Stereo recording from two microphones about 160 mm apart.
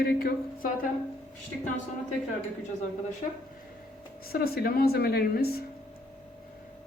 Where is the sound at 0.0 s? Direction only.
70° left (ahead or behind).